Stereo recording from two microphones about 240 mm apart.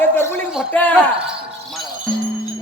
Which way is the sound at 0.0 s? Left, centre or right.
Centre.